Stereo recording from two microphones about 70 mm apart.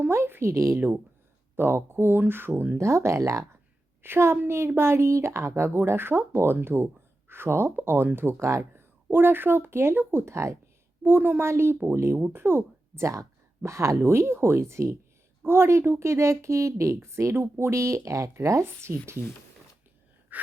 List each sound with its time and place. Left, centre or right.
0.0 s speech: right
1.5 s speech: right
2.7 s speech: right
4.0 s speech: right
11.0 s speech: right
20.3 s gasp: right